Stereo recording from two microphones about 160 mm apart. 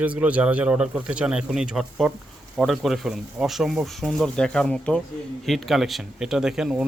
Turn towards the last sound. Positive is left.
turn(degrees=-5)  # may be behind; listen again after turning